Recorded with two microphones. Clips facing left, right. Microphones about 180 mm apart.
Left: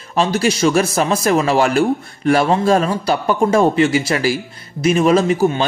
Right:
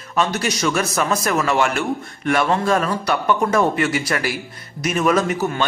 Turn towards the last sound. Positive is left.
turn(degrees=30)  # may be behind; listen again after turning